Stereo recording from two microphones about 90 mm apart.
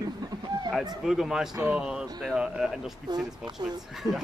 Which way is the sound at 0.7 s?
5° right (ahead or behind).